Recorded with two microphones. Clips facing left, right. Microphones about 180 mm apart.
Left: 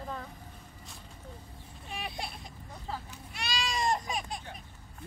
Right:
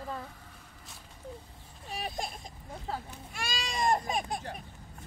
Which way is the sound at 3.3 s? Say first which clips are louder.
Left 2 dB; 45° right (ahead or behind).